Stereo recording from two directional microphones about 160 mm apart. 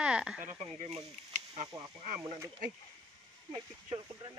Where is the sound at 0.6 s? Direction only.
40° right (ahead or behind).